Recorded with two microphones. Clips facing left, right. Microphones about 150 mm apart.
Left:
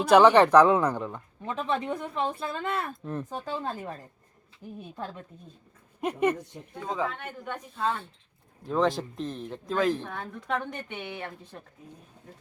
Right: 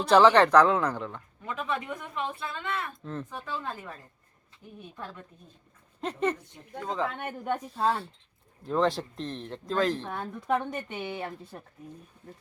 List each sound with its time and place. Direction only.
0.1 s speech: 15° left (ahead or behind)
1.5 s a woman's voice: 30° left (ahead or behind)
3.0 s speech: 15° left (ahead or behind)
3.2 s a woman's voice: 35° left (ahead or behind)
6.0 s speech: 10° left (ahead or behind)
6.8 s speech: centre (ahead or behind)
7.2 s speech: 50° right (ahead or behind)
7.7 s speech: 35° right (ahead or behind)
8.6 s speech: centre (ahead or behind)
10.2 s speech: 10° right (ahead or behind)